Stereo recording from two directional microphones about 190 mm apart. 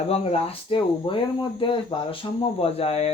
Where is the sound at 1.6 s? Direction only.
25° left (ahead or behind).